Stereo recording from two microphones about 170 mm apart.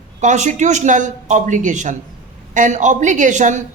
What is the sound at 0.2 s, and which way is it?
A woman's voice, 45° right (ahead or behind).